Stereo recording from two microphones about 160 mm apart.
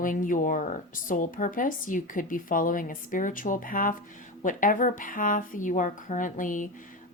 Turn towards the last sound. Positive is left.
turn(degrees=55)  # may be behind; listen again after turning